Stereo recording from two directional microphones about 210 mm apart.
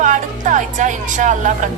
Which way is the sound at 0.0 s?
35° right (ahead or behind).